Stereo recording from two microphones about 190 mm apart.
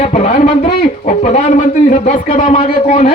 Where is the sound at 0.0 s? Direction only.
35° left (ahead or behind).